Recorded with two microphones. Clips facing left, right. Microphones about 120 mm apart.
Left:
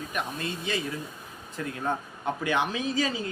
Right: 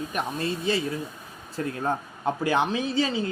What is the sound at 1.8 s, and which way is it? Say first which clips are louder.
Speech: right 2 dB; 30° right (ahead or behind).